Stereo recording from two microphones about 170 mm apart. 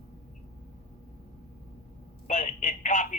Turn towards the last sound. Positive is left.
turn(degrees=50)  # may be behind; listen again after turning